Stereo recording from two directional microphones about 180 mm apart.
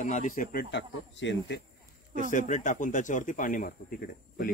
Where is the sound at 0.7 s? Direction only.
80° left.